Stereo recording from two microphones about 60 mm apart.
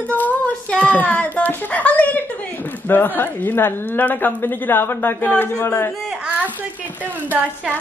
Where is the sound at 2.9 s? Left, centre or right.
Left.